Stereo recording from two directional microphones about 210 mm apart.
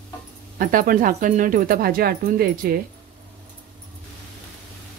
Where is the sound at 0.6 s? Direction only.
40° right (ahead or behind).